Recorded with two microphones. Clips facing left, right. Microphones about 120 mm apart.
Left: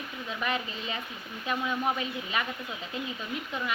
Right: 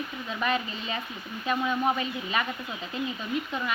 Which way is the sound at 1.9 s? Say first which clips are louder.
Right 3 dB; 5° left (ahead or behind).